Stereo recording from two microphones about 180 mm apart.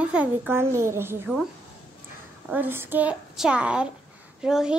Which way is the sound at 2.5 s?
10° right (ahead or behind).